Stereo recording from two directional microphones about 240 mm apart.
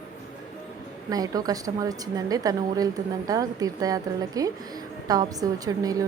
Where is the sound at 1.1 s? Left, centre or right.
Centre.